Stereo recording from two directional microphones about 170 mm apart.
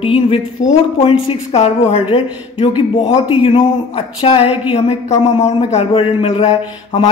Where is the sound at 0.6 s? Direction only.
45° left (ahead or behind).